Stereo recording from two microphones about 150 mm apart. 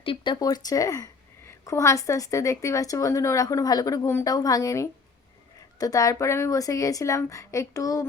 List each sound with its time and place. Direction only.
0.0 s speech: 35° left (ahead or behind)
0.3 s a woman's voice: 25° left (ahead or behind)